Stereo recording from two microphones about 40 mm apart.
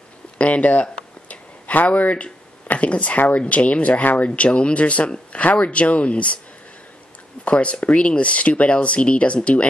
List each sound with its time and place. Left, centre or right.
0.4 s speech: left
1.3 s a sound: left
3.2 s speech: left
4.3 s speech: left
7.4 s speech: left